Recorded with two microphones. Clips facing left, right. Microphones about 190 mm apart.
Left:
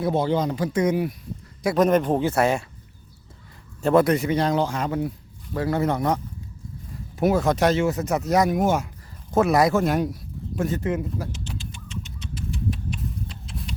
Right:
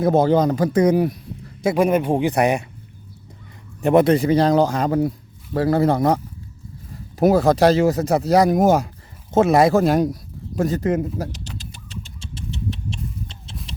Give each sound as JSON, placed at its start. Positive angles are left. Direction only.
{"t": 0.0, "sound": "speech", "side_deg": -45}
{"t": 1.7, "sound": "speech", "side_deg": -10}
{"t": 3.8, "sound": "speech", "side_deg": -20}
{"t": 7.2, "sound": "speech", "side_deg": -35}
{"t": 9.3, "sound": "a sound", "side_deg": -25}